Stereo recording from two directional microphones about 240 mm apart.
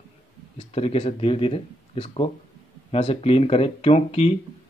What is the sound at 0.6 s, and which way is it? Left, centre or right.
Speech, left.